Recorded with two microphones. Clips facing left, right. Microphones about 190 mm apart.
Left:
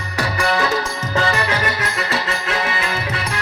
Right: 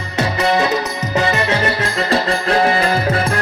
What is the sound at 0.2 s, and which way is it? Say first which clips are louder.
Music: right 4 dB; 20° right (ahead or behind).